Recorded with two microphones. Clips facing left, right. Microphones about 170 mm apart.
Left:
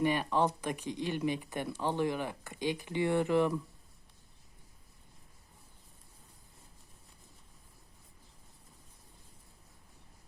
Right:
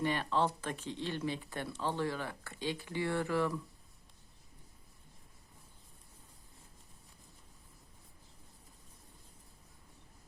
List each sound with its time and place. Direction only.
0.0 s speech: 15° left (ahead or behind)